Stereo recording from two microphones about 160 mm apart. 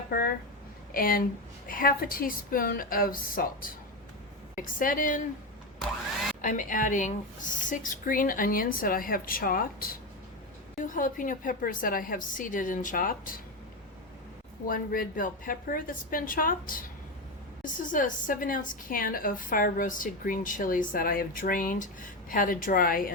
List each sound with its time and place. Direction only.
0.1 s a woman's voice: 65° left (ahead or behind)
6.4 s a woman's voice: 55° left (ahead or behind)
14.7 s a woman's voice: 60° left (ahead or behind)